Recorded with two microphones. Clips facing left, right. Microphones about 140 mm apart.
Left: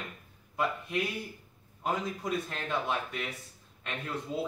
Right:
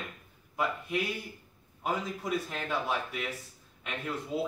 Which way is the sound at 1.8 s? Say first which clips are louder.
Even; 5° right (ahead or behind).